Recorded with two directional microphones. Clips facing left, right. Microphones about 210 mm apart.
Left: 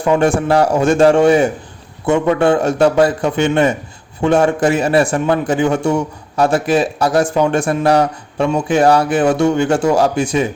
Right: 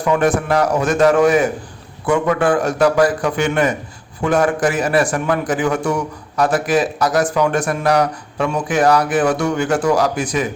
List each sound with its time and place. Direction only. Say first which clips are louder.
0.0 s a man's voice: left 2 dB; 25° left (ahead or behind)